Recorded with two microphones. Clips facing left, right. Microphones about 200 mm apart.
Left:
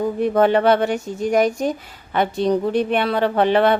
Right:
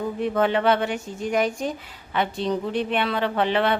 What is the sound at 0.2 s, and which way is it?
A woman's voice, 45° left (ahead or behind).